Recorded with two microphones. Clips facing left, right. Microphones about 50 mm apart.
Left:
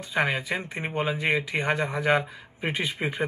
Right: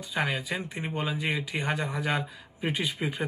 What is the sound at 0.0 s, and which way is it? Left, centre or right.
Speech, left.